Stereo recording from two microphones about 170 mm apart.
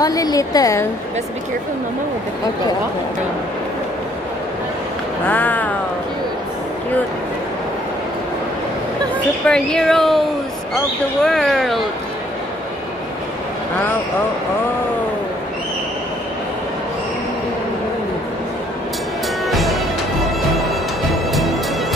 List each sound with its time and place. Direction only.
0.0 s a woman's voice: 20° left (ahead or behind)
5.3 s a sound: 10° left (ahead or behind)
9.1 s speech: 5° left (ahead or behind)
11.2 s speech: centre (ahead or behind)
19.4 s music: centre (ahead or behind)
21.3 s music: centre (ahead or behind)